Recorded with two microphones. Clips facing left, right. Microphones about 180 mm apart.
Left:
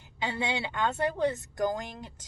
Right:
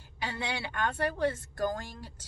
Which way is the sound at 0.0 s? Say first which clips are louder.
Left 4 dB; 20° left (ahead or behind).